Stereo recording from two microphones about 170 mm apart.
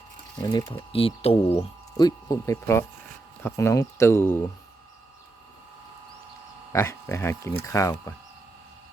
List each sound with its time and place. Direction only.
0.3 s speech: 25° left (ahead or behind)
2.0 s speech: 20° left (ahead or behind)
6.7 s speech: 15° left (ahead or behind)